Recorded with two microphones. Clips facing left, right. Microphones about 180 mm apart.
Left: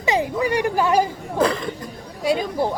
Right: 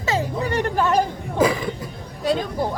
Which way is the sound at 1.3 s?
5° right (ahead or behind).